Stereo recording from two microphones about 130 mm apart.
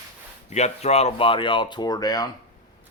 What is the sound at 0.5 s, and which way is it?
Speech, 60° left (ahead or behind).